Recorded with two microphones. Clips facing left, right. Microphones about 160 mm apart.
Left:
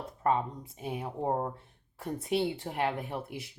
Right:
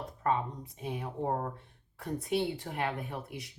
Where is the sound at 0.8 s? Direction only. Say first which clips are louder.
Left 1 dB; 25° left (ahead or behind).